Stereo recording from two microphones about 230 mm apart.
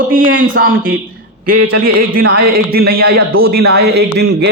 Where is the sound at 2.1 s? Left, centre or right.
Right.